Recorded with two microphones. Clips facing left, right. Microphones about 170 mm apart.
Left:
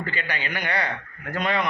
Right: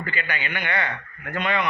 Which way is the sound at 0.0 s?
35° left (ahead or behind).